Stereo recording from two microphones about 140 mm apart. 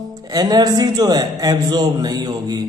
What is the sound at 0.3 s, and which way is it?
A man's voice, 30° right (ahead or behind).